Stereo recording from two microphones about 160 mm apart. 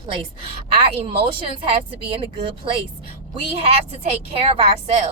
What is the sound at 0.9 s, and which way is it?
A woman's voice, 35° right (ahead or behind).